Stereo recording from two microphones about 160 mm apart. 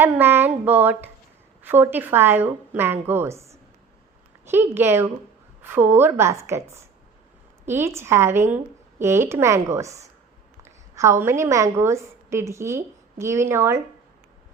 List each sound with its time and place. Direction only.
0.0 s a woman's voice: 15° right (ahead or behind)